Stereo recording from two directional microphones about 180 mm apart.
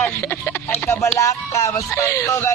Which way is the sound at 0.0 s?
10° left (ahead or behind).